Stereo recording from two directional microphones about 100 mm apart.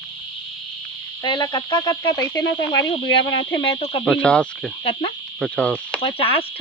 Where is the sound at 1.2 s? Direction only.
45° left (ahead or behind); by 4.0 s 65° left (ahead or behind).